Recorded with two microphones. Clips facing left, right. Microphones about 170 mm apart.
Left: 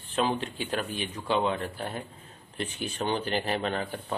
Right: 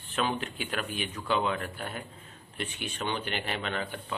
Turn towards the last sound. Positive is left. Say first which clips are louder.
# left 3 dB
turn(degrees=35)  # may be behind; listen again after turning